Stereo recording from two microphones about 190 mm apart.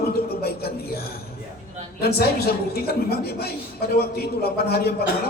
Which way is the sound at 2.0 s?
55° left (ahead or behind).